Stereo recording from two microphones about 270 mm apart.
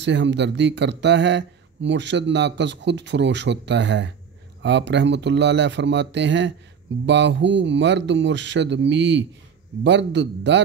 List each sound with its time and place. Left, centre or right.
0.0 s speech: right